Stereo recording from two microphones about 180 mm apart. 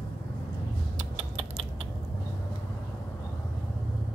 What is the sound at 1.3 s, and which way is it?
Typing, 30° right (ahead or behind).